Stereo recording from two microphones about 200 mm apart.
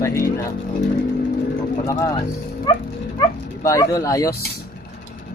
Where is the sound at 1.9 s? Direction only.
15° left (ahead or behind).